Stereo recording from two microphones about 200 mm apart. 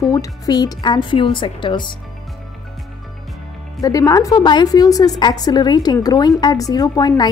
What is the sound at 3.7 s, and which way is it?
A woman's voice, 15° left (ahead or behind).